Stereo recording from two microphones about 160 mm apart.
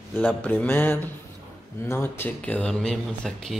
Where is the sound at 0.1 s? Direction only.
10° left (ahead or behind).